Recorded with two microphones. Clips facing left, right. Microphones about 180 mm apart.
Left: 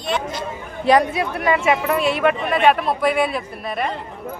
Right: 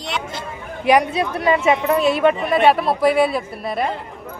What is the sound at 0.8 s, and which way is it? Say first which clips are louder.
Speech: even; 15° right (ahead or behind).